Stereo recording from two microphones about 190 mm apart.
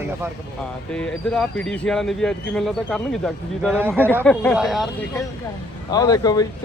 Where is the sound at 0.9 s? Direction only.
5° left (ahead or behind).